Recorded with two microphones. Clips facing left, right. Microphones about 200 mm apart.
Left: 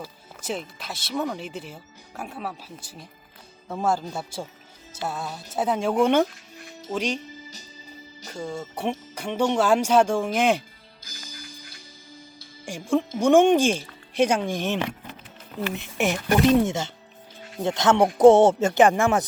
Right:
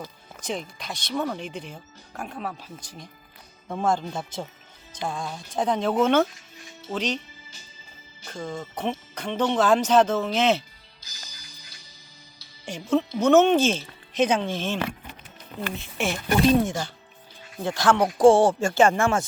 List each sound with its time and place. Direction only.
0.0 s speech: 5° left (ahead or behind)
7.2 s music: 40° left (ahead or behind)
8.3 s speech: 10° left (ahead or behind)
11.0 s music: 50° left (ahead or behind)
12.6 s speech: 10° left (ahead or behind)